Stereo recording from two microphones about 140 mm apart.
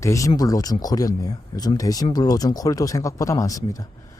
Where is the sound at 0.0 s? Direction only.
20° left (ahead or behind).